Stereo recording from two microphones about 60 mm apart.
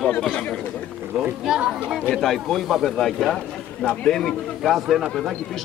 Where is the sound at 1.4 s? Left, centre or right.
Centre.